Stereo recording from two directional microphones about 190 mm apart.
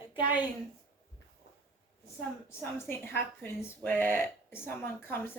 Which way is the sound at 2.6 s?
15° left (ahead or behind).